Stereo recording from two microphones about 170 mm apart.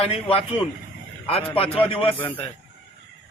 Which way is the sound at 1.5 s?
35° left (ahead or behind).